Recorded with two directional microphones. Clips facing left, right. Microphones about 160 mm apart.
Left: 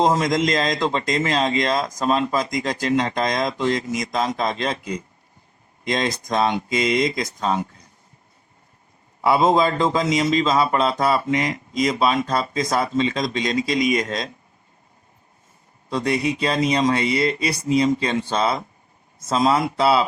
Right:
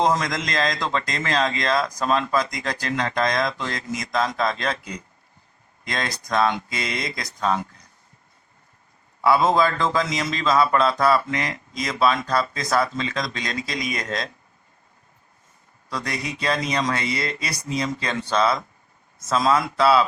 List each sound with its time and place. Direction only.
0.0 s a man's voice: 20° left (ahead or behind)
9.2 s a man's voice: 25° left (ahead or behind)
15.9 s a man's voice: 25° left (ahead or behind)